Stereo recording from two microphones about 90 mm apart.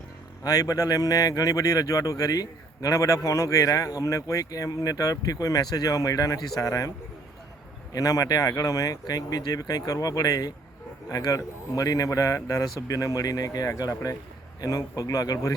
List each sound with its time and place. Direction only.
0.4 s speech: 40° left (ahead or behind)
7.9 s speech: 40° left (ahead or behind)